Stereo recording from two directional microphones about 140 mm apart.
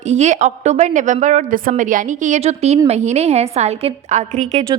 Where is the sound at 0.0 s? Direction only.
55° right (ahead or behind).